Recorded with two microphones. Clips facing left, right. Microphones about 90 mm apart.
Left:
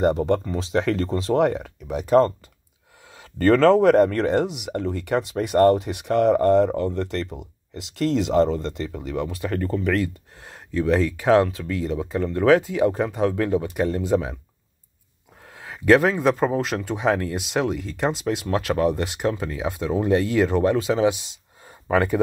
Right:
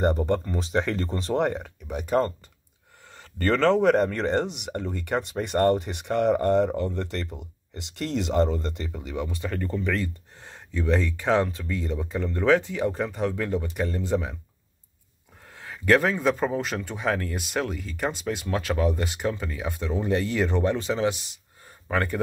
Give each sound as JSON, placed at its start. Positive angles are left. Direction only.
{"t": 0.3, "sound": "speech", "side_deg": 0}
{"t": 15.5, "sound": "speech", "side_deg": 5}